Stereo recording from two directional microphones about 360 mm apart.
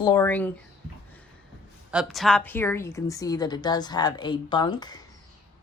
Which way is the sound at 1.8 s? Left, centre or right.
Centre.